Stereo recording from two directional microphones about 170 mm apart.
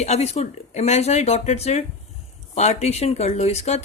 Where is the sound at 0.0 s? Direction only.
40° left (ahead or behind).